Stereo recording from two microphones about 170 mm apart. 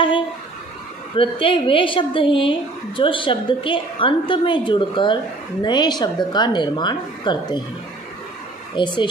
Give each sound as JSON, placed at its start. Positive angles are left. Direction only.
{"t": 1.1, "sound": "a woman's voice", "side_deg": 30}
{"t": 8.7, "sound": "a woman's voice", "side_deg": 30}